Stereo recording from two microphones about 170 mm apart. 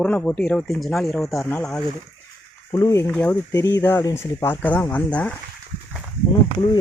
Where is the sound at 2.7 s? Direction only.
20° left (ahead or behind).